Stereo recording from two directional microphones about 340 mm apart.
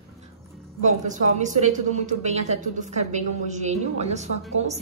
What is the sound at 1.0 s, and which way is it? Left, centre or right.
A woman's voice, right.